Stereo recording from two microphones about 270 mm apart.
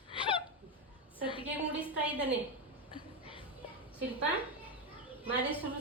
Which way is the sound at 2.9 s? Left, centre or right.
Centre.